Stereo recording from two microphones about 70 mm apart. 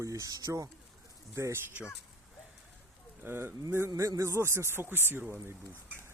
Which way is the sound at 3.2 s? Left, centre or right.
Right.